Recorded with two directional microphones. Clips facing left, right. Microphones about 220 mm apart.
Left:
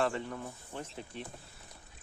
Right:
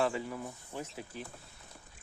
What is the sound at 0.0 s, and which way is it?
Speech, 5° right (ahead or behind).